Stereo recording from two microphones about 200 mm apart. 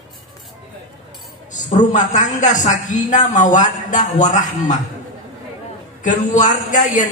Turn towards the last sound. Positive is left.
turn(degrees=40)  # may be behind; listen again after turning